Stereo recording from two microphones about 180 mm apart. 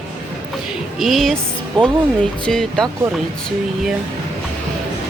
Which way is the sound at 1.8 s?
30° right (ahead or behind).